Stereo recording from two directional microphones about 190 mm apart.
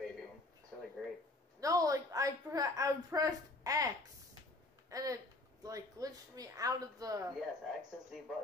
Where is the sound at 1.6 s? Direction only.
15° right (ahead or behind).